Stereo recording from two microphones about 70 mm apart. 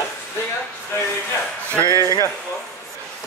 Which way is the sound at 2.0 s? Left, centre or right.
Left.